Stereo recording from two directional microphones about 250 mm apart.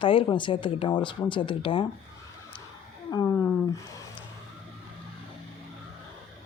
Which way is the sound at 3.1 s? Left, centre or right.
Centre.